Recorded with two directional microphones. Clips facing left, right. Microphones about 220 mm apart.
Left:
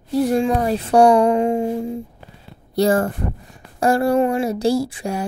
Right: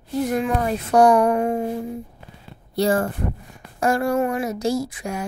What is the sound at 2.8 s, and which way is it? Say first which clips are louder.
Speech: left 3 dB; 45° left (ahead or behind).